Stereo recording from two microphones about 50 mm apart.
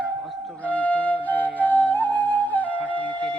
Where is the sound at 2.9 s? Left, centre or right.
Left.